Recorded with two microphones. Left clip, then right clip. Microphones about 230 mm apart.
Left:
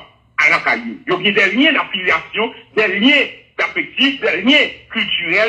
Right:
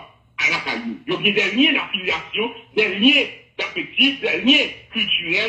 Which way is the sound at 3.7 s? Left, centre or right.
Centre.